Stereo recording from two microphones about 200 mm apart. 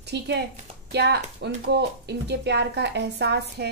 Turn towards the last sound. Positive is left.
turn(degrees=-55)  # may be behind; listen again after turning